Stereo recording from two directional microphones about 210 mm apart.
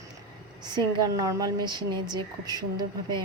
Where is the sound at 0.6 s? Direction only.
15° right (ahead or behind).